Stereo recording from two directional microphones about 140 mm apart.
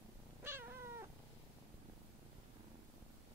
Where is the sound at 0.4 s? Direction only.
15° right (ahead or behind).